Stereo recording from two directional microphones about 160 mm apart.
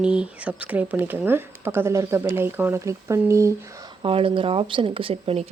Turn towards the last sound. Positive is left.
turn(degrees=-35)  # may be behind; listen again after turning